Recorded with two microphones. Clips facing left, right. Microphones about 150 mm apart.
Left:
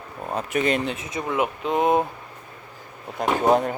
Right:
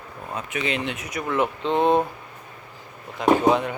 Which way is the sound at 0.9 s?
25° left (ahead or behind).